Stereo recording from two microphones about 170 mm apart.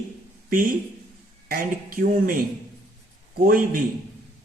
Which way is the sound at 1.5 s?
60° right (ahead or behind).